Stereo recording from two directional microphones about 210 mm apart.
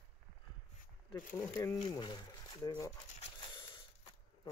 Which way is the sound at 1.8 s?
20° left (ahead or behind).